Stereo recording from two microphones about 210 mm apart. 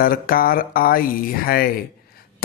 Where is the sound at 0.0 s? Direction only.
45° left (ahead or behind).